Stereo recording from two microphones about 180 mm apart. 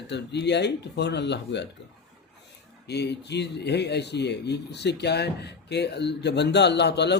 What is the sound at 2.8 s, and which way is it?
A man's voice, 70° left (ahead or behind).